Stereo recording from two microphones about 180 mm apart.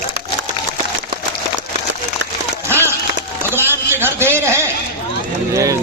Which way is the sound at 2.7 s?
15° right (ahead or behind).